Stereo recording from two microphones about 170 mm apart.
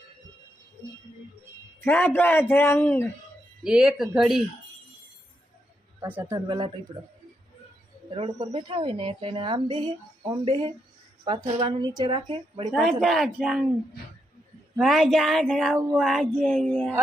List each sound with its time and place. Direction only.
1.8 s speech: 10° left (ahead or behind)
3.6 s speech: 5° right (ahead or behind)
6.0 s a man's voice: 10° right (ahead or behind)
8.1 s a woman's voice: 35° right (ahead or behind)
12.7 s speech: centre (ahead or behind)
14.8 s speech: centre (ahead or behind)